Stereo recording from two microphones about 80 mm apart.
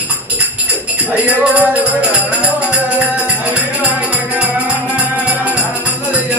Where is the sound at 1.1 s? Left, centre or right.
Centre.